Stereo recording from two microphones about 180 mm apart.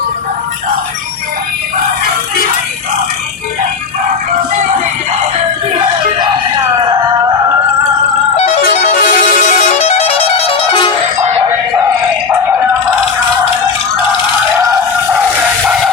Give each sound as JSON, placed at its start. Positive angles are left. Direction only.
{"t": 8.8, "sound": "music", "side_deg": 40}